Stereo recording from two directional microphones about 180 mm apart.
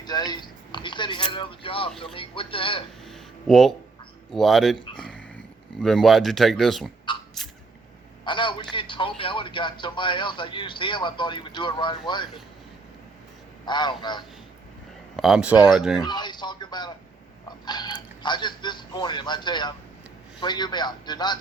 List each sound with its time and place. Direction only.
0.0 s speech: 20° left (ahead or behind)
3.1 s a sound: centre (ahead or behind)
4.3 s speech: centre (ahead or behind)
4.9 s a sound: 5° left (ahead or behind)
5.8 s speech: centre (ahead or behind)
7.4 s a sound: centre (ahead or behind)
8.2 s a man's voice: 25° left (ahead or behind)
13.7 s speech: 25° left (ahead or behind)
15.1 s speech: centre (ahead or behind)
16.0 s speech: 25° left (ahead or behind)